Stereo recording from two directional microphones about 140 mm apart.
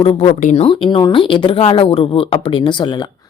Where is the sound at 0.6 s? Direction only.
35° left (ahead or behind).